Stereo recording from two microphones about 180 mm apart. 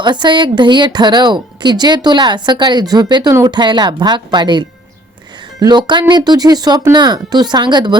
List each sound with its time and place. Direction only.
0.0 s speech: 25° right (ahead or behind)